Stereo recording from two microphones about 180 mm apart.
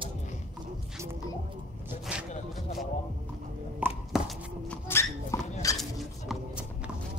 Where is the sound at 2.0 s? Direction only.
Centre (ahead or behind).